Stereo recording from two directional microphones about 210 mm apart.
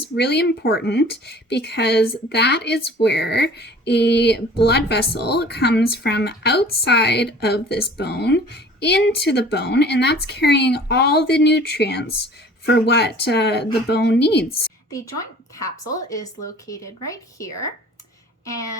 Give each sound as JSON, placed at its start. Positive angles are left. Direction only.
{"t": 0.2, "sound": "speech", "side_deg": 50}
{"t": 14.8, "sound": "a woman's voice", "side_deg": 15}